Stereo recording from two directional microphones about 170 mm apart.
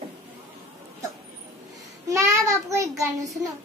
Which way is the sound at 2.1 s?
15° right (ahead or behind).